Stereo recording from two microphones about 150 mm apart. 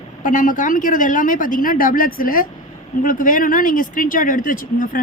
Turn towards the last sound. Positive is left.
turn(degrees=65)  # may be behind; listen again after turning